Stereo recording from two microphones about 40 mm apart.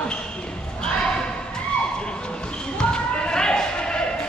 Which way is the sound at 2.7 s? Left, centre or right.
Left.